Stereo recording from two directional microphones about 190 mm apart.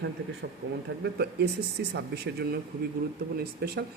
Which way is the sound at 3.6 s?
55° right (ahead or behind).